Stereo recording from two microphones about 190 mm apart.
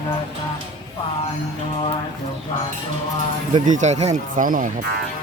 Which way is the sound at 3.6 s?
40° right (ahead or behind).